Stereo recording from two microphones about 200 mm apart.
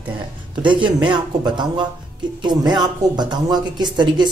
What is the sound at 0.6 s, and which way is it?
A man's voice, 25° right (ahead or behind).